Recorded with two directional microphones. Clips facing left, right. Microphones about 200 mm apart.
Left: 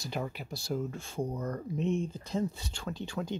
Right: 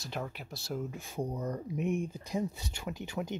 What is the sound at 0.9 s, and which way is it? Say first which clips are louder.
Speech: left 1 dB; 15° right (ahead or behind).